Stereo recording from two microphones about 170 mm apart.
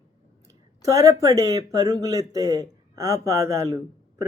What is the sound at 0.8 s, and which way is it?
Speech, 20° right (ahead or behind).